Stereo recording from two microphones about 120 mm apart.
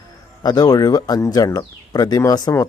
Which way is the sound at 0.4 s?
35° left (ahead or behind).